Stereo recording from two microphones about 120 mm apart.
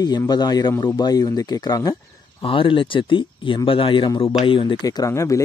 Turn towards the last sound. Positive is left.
turn(degrees=25)  # may be behind; listen again after turning